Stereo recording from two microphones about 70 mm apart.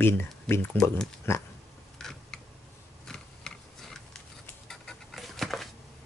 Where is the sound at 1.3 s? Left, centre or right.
Left.